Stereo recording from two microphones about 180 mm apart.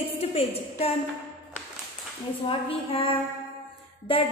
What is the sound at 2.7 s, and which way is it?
Speech, 30° left (ahead or behind).